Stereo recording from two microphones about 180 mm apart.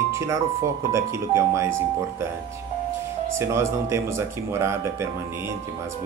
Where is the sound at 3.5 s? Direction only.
15° right (ahead or behind).